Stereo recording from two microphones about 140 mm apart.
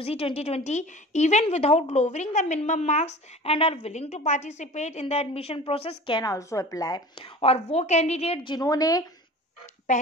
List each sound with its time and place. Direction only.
0.0 s a woman's voice: 45° left (ahead or behind)
8.5 s speech: 25° left (ahead or behind)